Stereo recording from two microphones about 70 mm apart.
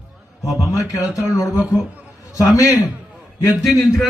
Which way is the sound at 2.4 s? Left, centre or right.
Left.